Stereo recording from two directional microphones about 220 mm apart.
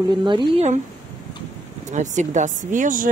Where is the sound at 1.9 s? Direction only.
35° right (ahead or behind).